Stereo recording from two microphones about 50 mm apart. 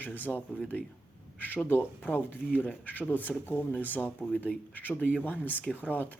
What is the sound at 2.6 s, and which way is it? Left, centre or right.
A man's voice, left.